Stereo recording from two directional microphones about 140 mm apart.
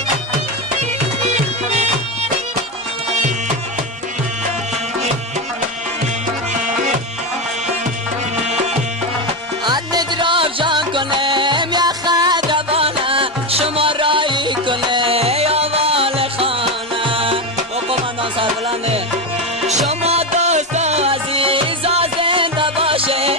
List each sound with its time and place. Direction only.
1.3 s music: 50° right (ahead or behind)
9.7 s music: 30° right (ahead or behind)
18.4 s music: 45° right (ahead or behind)